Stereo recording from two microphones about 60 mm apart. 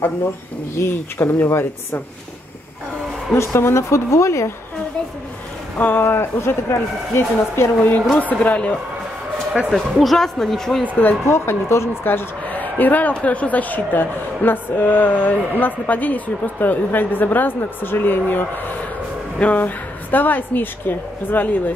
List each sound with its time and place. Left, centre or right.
0.7 s speech: left
3.3 s speech: left
5.8 s speech: left
8.2 s speech: left
9.7 s speech: centre
11.2 s speech: left
12.0 s a man's voice: left
19.5 s a man's voice: left